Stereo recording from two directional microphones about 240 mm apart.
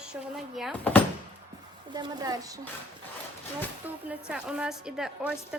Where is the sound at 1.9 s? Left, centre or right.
Centre.